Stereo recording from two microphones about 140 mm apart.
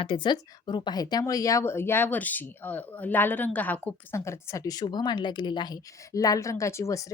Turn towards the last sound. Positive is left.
turn(degrees=20)  # may be behind; listen again after turning